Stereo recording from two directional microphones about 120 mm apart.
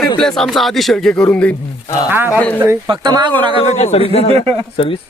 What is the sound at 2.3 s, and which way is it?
Speech, 15° left (ahead or behind).